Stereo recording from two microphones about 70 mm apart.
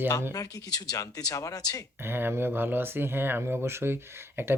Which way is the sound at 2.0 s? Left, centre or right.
Right.